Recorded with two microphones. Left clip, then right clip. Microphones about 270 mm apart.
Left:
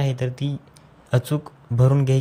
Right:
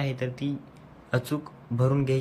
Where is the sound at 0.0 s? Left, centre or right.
Left.